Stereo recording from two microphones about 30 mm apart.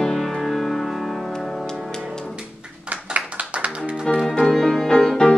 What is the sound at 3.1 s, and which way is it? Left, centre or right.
Music, right.